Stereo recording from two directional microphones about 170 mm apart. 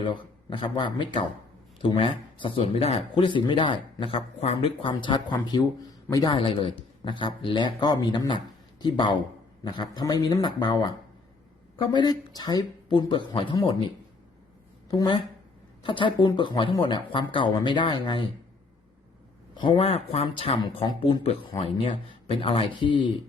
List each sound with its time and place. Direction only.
0.0 s a woman's voice: 30° left (ahead or behind)
19.5 s speech: 30° left (ahead or behind)